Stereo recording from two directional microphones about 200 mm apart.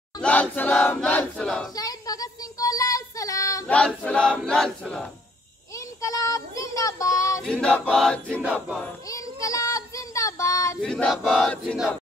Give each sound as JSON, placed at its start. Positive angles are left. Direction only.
{"t": 0.2, "sound": "battle cry", "side_deg": 5}
{"t": 1.8, "sound": "child singing", "side_deg": 20}
{"t": 5.9, "sound": "child singing", "side_deg": 15}
{"t": 7.4, "sound": "a sound", "side_deg": 5}
{"t": 9.1, "sound": "child singing", "side_deg": 15}
{"t": 10.8, "sound": "a sound", "side_deg": 5}